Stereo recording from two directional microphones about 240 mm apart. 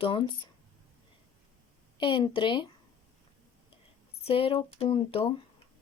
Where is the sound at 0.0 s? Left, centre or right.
Left.